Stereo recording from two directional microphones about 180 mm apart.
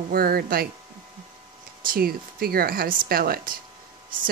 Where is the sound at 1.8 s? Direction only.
55° right (ahead or behind).